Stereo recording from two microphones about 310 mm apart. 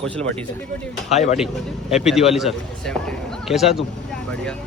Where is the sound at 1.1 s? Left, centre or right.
Left.